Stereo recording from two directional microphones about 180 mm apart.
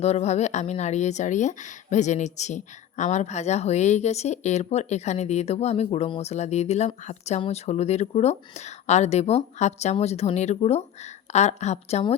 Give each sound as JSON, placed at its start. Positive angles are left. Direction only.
{"t": 0.0, "sound": "a woman's voice", "side_deg": 35}